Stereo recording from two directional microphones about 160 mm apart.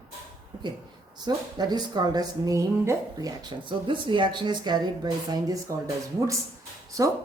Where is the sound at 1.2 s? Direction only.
25° right (ahead or behind).